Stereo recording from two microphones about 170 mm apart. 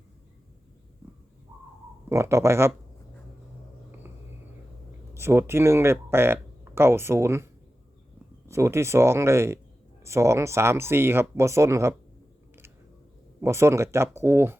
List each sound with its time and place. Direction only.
2.0 s speech: 15° right (ahead or behind)
5.1 s speech: 15° right (ahead or behind)
13.4 s speech: 15° right (ahead or behind)